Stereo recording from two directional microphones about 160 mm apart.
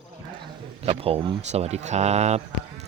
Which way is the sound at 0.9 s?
35° right (ahead or behind).